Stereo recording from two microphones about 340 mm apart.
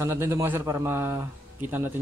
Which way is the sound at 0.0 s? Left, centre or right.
Centre.